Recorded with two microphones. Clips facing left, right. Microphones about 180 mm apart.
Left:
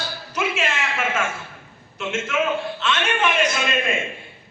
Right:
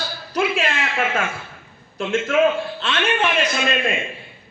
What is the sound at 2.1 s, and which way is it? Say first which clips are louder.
A man's voice: right 5 dB; 35° right (ahead or behind).